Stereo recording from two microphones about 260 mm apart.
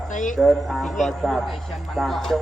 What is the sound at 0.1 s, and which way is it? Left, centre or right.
Speech, left.